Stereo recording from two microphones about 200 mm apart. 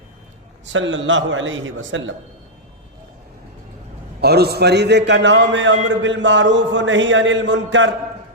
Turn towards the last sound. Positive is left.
turn(degrees=-65)  # may be behind; listen again after turning